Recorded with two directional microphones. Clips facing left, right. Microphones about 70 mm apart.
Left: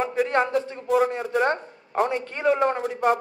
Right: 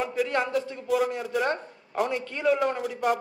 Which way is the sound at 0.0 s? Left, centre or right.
Left.